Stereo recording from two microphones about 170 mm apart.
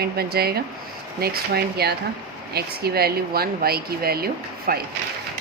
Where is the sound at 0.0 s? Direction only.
65° right (ahead or behind).